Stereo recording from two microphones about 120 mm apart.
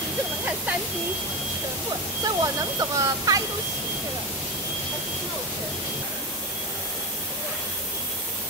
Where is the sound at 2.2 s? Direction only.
30° right (ahead or behind).